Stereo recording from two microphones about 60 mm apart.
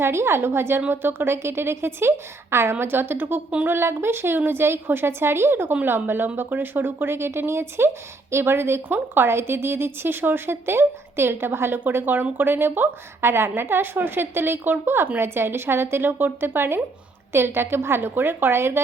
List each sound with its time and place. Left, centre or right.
0.0 s a woman's voice: right